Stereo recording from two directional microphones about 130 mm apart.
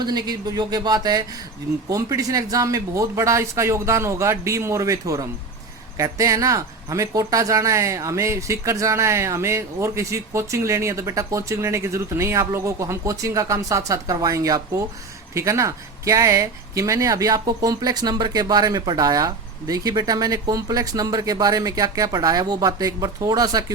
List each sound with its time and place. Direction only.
0.0 s speech: 30° right (ahead or behind)